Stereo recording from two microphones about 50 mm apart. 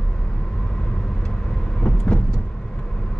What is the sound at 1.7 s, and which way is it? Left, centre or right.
Vehicle, centre.